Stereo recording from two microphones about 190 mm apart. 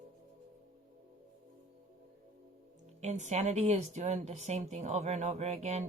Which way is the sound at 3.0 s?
40° right (ahead or behind).